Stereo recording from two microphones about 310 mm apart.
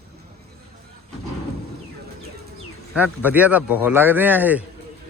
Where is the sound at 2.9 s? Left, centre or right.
Centre.